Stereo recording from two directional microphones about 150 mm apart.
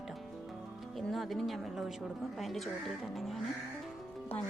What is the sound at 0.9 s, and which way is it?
Speech, centre (ahead or behind).